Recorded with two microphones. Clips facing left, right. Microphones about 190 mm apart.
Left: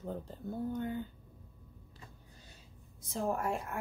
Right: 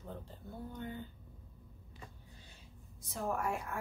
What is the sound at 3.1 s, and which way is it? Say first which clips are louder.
Speech: left 3 dB; 20° left (ahead or behind).